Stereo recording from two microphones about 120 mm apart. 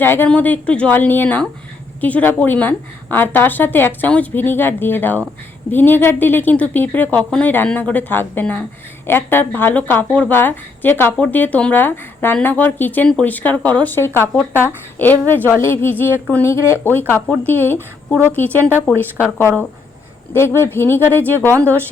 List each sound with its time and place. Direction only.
0.0 s a woman's voice: 15° left (ahead or behind)
20.6 s a woman's voice: 20° left (ahead or behind)